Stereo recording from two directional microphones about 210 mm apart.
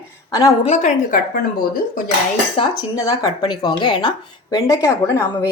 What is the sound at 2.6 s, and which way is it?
A woman's voice, 15° left (ahead or behind).